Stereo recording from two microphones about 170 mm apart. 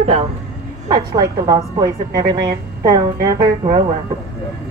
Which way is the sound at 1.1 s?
20° right (ahead or behind).